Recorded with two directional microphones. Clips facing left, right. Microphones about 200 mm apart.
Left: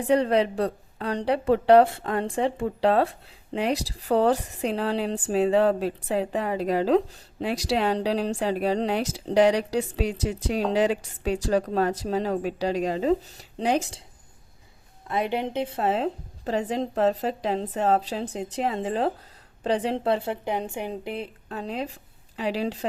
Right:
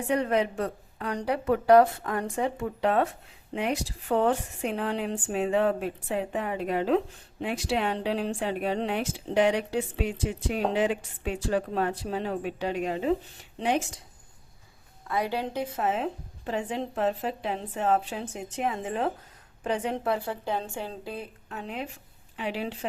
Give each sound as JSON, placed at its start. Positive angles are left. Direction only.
{"t": 0.0, "sound": "a woman's voice", "side_deg": 35}
{"t": 15.0, "sound": "a woman's voice", "side_deg": 25}